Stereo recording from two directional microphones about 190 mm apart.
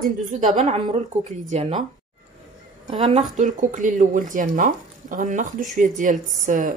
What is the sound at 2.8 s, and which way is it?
Speech, 25° right (ahead or behind).